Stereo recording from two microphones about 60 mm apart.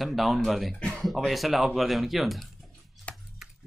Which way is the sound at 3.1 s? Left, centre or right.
Left.